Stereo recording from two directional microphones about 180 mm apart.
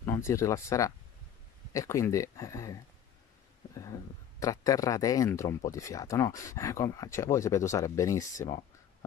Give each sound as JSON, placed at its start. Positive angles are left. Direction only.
{"t": 0.0, "sound": "speech", "side_deg": 15}